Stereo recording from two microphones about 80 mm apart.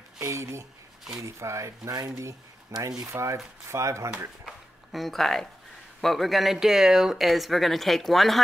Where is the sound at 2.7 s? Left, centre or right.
Right.